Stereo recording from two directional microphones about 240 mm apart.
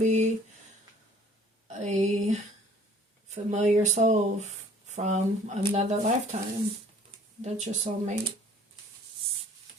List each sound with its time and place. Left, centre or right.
0.0 s speech: right
1.6 s speech: right
7.4 s speech: right